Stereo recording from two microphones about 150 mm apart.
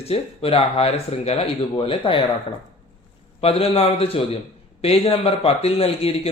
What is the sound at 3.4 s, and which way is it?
A man's voice, 40° left (ahead or behind).